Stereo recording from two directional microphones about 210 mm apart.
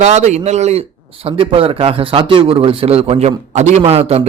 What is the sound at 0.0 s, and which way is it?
A man's voice, 35° right (ahead or behind).